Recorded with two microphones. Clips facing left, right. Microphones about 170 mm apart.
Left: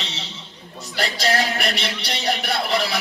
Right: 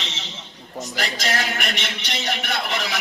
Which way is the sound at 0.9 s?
35° left (ahead or behind).